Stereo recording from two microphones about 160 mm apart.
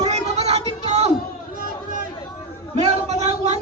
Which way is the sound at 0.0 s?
40° right (ahead or behind).